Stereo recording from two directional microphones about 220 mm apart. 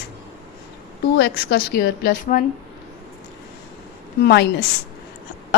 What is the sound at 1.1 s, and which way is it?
A woman's voice, 50° left (ahead or behind).